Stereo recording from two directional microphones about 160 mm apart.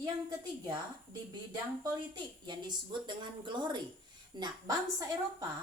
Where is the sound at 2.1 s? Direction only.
25° right (ahead or behind).